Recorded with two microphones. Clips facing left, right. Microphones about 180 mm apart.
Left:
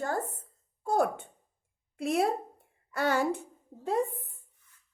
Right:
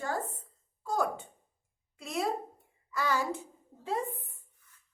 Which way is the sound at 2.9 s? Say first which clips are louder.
Left 4 dB; 60° left (ahead or behind).